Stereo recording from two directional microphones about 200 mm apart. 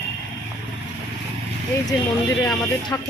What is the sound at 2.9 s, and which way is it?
Speech, 15° left (ahead or behind).